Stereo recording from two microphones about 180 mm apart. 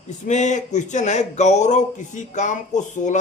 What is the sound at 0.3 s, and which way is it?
Speech, 40° left (ahead or behind).